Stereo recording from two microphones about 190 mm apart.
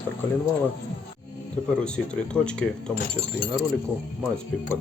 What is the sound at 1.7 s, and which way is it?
Speech, 5° left (ahead or behind).